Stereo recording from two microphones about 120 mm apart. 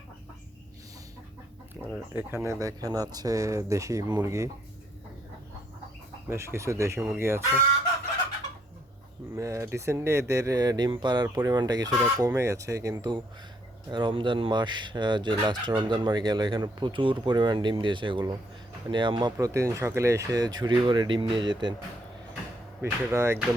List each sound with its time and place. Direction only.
1.9 s speech: 15° right (ahead or behind)
6.2 s speech: 20° right (ahead or behind)
9.3 s speech: 25° right (ahead or behind); by 19.3 s 40° right (ahead or behind)
19.4 s speech: 25° right (ahead or behind)
22.8 s speech: 20° right (ahead or behind)